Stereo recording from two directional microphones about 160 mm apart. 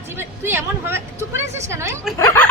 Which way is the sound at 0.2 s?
15° right (ahead or behind).